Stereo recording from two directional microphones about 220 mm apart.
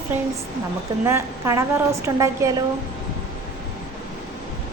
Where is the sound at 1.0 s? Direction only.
10° right (ahead or behind).